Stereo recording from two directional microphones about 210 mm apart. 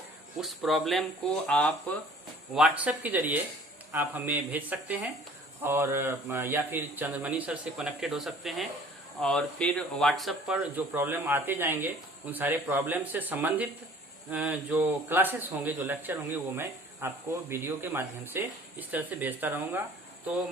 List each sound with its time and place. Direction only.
0.3 s speech: centre (ahead or behind)